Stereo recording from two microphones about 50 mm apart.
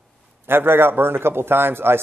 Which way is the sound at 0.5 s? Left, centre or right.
Right.